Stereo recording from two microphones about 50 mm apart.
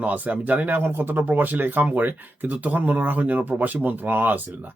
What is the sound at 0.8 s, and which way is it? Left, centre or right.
Speech, right.